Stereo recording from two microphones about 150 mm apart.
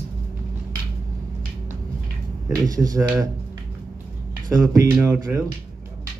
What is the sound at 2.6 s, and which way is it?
Speech, 25° right (ahead or behind).